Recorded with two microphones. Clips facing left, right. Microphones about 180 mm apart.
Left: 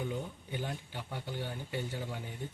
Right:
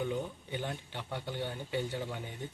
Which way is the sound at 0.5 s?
5° left (ahead or behind).